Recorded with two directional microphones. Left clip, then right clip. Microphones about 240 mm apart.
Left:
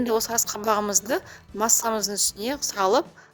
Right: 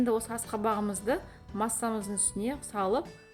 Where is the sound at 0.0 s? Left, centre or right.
Left.